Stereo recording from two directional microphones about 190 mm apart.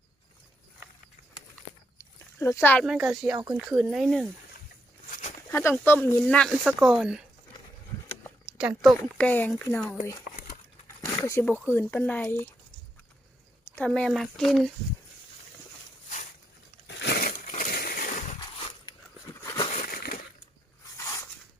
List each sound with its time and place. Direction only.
2.0 s a sound: 15° left (ahead or behind)
3.1 s speech: centre (ahead or behind)
5.5 s speech: 10° left (ahead or behind); by 7.3 s 5° right (ahead or behind)
8.4 s speech: 5° right (ahead or behind)
9.0 s speech: 10° left (ahead or behind)
10.2 s crumpling: 45° left (ahead or behind)
11.0 s a sound: 15° left (ahead or behind)
11.7 s speech: 10° left (ahead or behind)
13.7 s speech: 5° left (ahead or behind)
16.8 s a sound: 65° left (ahead or behind); by 18.3 s 45° left (ahead or behind)
18.6 s biting: 20° left (ahead or behind)
19.8 s crushing: 50° left (ahead or behind)
21.0 s a sound: 15° left (ahead or behind)